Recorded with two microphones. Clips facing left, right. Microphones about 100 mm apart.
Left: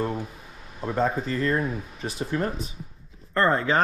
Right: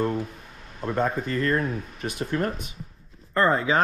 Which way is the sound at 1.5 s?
5° left (ahead or behind).